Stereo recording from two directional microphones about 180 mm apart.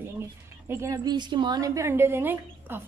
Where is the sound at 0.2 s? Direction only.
15° right (ahead or behind).